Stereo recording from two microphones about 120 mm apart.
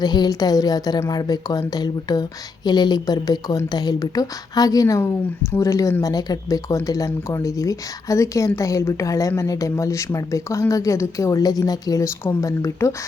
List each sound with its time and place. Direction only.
0.0 s a woman's voice: 35° left (ahead or behind)